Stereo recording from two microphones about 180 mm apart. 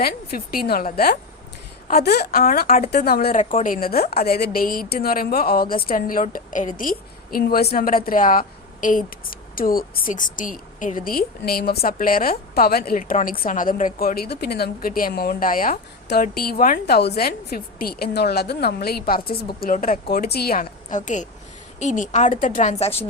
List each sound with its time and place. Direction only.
0.0 s a woman's voice: 55° left (ahead or behind)
3.3 s a woman's voice: 50° left (ahead or behind)